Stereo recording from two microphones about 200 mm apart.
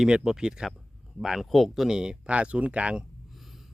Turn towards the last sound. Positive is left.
turn(degrees=0)  # may be behind; listen again after turning